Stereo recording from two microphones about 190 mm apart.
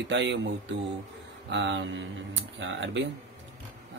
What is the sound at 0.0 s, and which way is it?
Speech, 70° right (ahead or behind).